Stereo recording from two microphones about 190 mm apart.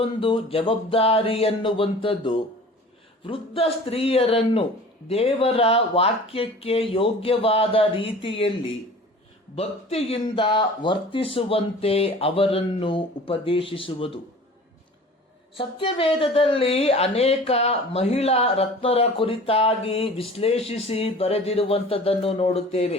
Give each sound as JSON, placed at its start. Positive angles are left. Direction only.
{"t": 0.0, "sound": "speech", "side_deg": 30}
{"t": 9.6, "sound": "speech", "side_deg": 30}
{"t": 15.5, "sound": "speech", "side_deg": 25}